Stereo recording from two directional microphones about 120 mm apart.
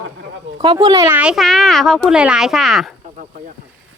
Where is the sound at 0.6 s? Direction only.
35° right (ahead or behind).